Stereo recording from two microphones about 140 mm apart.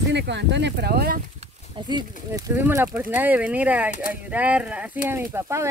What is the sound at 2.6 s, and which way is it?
Speech, 15° right (ahead or behind).